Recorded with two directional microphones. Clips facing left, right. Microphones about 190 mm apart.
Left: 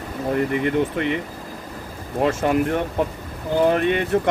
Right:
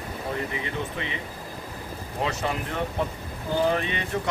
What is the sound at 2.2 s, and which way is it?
Speech, 50° left (ahead or behind).